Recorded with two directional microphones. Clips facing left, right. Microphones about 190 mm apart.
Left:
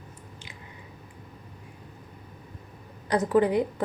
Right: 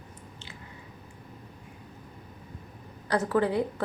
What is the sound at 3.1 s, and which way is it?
Speech, 15° left (ahead or behind).